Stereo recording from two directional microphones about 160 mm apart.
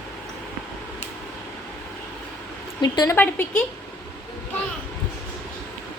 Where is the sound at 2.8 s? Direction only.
25° left (ahead or behind).